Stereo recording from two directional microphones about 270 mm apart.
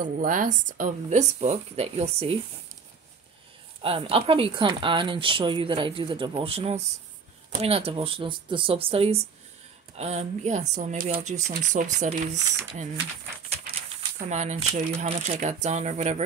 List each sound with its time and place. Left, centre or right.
0.0 s speech: right
3.8 s speech: centre
14.3 s speech: right